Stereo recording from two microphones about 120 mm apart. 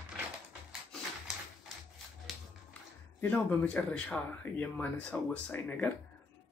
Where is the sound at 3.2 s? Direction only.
15° left (ahead or behind).